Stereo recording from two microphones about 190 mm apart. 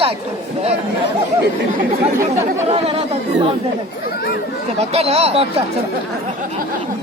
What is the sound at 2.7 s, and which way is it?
Speech, 30° right (ahead or behind).